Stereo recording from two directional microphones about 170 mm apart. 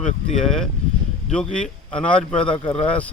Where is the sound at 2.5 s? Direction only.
30° left (ahead or behind).